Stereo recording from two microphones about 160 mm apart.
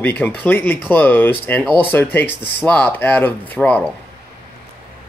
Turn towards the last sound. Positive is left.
turn(degrees=10)  # may be behind; listen again after turning